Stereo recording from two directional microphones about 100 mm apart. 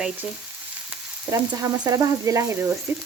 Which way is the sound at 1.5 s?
30° right (ahead or behind).